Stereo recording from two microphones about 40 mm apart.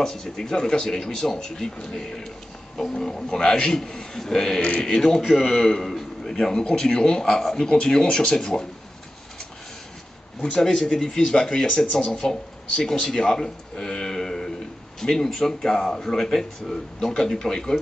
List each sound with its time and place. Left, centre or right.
0.0 s speech: centre
10.4 s speech: left
12.1 s speech: centre